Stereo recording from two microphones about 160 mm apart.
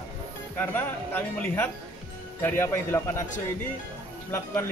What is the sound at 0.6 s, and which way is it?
A man's voice, 10° left (ahead or behind).